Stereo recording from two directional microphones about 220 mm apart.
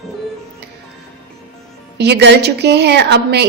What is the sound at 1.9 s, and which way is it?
A woman's voice, 50° right (ahead or behind).